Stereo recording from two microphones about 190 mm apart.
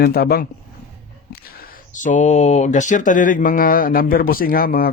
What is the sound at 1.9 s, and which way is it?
Speech, 40° left (ahead or behind).